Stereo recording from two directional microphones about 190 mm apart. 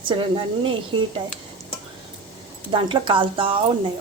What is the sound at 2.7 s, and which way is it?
Speech, 25° right (ahead or behind).